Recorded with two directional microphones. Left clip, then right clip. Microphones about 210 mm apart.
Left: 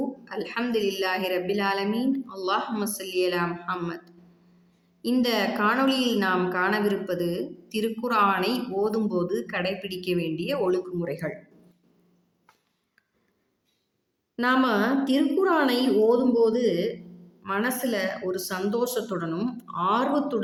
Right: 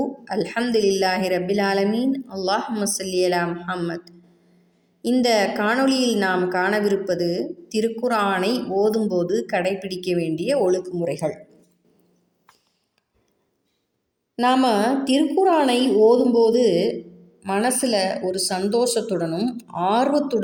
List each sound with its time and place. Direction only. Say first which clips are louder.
0.3 s a woman's voice: right 7 dB; 20° right (ahead or behind)
14.3 s a woman's voice: right 5 dB; 20° right (ahead or behind)